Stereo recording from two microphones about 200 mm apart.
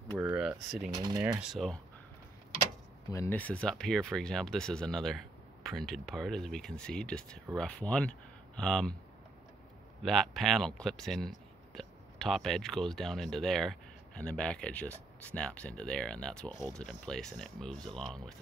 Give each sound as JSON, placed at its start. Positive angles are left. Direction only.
{"t": 0.2, "sound": "speech", "side_deg": -5}
{"t": 0.9, "sound": "speech", "side_deg": -20}
{"t": 1.4, "sound": "speech", "side_deg": 0}
{"t": 3.1, "sound": "speech", "side_deg": 10}
{"t": 10.0, "sound": "speech", "side_deg": 0}